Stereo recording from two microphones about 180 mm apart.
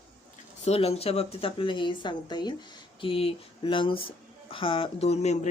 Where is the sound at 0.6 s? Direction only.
35° left (ahead or behind).